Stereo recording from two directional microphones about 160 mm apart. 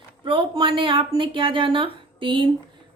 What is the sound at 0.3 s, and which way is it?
A woman's voice, 30° right (ahead or behind).